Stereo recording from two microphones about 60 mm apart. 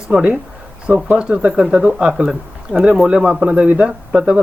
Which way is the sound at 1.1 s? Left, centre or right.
Right.